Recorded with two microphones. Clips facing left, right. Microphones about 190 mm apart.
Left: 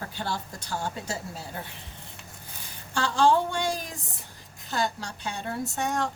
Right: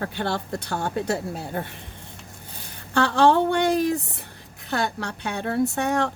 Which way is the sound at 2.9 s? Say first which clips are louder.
Right 4 dB; 60° right (ahead or behind).